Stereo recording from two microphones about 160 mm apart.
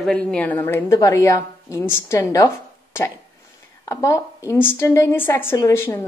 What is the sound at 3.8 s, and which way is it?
A woman's voice, 20° left (ahead or behind).